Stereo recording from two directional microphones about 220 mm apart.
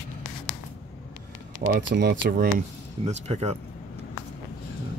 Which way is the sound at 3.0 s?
30° right (ahead or behind).